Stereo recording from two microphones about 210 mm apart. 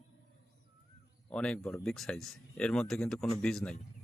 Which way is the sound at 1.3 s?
5° left (ahead or behind).